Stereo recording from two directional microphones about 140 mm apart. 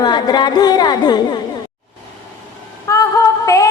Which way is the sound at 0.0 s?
30° left (ahead or behind).